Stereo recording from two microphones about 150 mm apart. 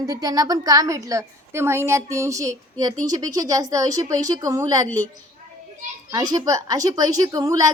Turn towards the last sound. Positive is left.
turn(degrees=-25)  # may be behind; listen again after turning